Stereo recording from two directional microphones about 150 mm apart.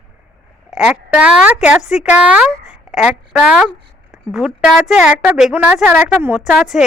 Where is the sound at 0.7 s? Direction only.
5° right (ahead or behind).